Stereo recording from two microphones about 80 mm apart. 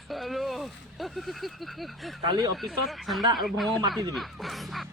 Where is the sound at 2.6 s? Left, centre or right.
Centre.